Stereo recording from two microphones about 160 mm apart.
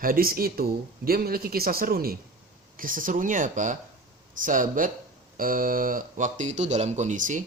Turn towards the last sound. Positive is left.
turn(degrees=-55)  # may be behind; listen again after turning